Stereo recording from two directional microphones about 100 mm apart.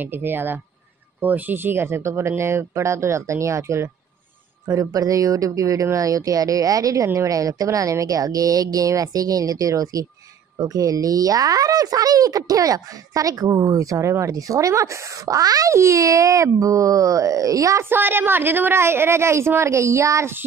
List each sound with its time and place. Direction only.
0.0 s speech: 20° right (ahead or behind)
17.8 s speech: 20° right (ahead or behind)